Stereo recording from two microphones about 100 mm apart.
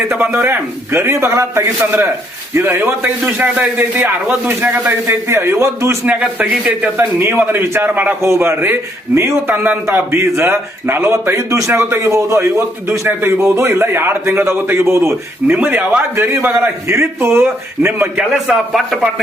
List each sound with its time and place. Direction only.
0.4 s a man's voice: 20° right (ahead or behind)
6.1 s a man's voice: 15° right (ahead or behind)
18.3 s a man's voice: centre (ahead or behind)